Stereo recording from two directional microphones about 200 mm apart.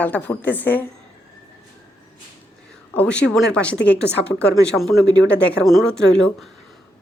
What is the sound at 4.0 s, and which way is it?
Speech, 55° left (ahead or behind).